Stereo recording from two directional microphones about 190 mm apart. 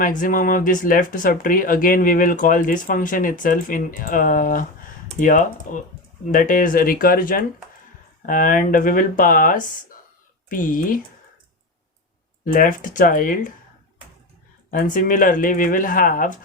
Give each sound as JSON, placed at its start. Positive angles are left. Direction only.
{"t": 0.0, "sound": "speech", "side_deg": 45}
{"t": 12.5, "sound": "speech", "side_deg": 45}
{"t": 14.7, "sound": "speech", "side_deg": 45}